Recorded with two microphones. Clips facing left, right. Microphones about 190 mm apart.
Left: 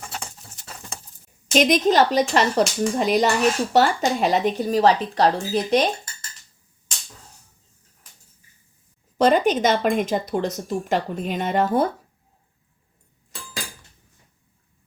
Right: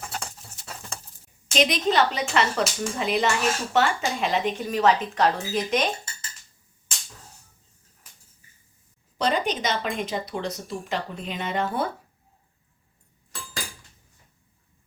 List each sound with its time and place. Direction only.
1.5 s speech: 45° left (ahead or behind)
9.1 s speech: 50° left (ahead or behind)